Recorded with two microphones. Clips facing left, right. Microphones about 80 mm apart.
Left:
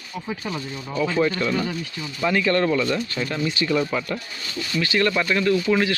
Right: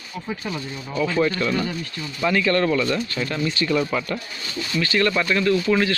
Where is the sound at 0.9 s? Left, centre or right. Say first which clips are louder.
Even; centre.